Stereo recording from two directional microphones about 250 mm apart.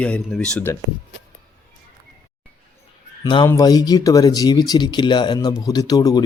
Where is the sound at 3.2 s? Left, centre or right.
Centre.